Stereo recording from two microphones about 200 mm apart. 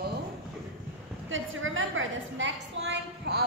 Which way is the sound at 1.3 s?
75° right (ahead or behind).